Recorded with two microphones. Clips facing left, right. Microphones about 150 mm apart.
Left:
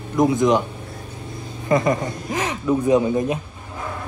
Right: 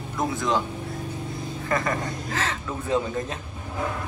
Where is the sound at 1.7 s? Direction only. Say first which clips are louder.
Left 8 dB; 20° left (ahead or behind).